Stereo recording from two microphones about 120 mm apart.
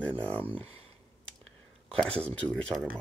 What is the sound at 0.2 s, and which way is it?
Speech, 15° left (ahead or behind).